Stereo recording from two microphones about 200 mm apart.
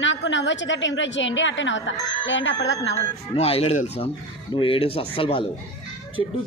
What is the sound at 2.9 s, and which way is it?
Speech, 30° left (ahead or behind).